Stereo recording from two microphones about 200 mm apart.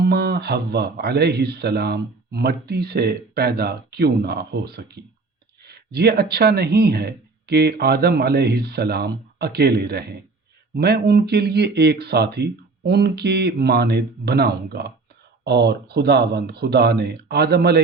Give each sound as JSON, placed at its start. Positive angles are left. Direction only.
{"t": 0.0, "sound": "a man's voice", "side_deg": -50}